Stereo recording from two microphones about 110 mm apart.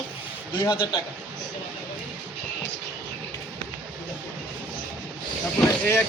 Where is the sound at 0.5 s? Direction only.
45° left (ahead or behind).